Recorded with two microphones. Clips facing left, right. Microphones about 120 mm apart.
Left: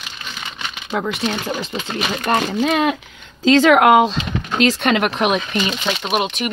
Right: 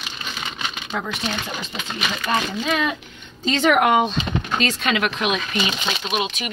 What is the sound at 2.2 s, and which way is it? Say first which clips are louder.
Speech: left 5 dB; 60° left (ahead or behind).